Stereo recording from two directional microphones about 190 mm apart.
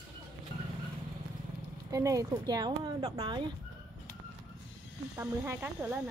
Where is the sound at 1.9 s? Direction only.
15° right (ahead or behind).